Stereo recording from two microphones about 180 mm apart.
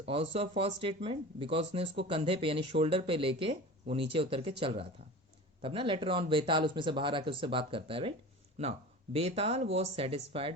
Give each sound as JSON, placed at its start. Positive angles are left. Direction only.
{"t": 0.0, "sound": "speech", "side_deg": -30}
{"t": 9.1, "sound": "speech", "side_deg": -35}